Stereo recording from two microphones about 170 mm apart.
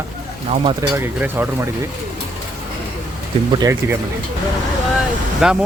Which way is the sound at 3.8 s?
15° right (ahead or behind).